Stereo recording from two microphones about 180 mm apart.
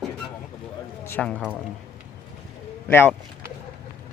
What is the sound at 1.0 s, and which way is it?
Speech, 10° left (ahead or behind).